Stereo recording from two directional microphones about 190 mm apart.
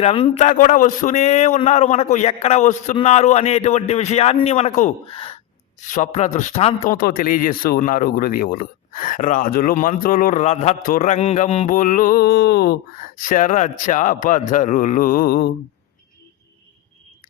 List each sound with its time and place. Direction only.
0.0 s a man's voice: 30° left (ahead or behind)
5.9 s a man's voice: 40° left (ahead or behind)
6.9 s speech: 50° left (ahead or behind)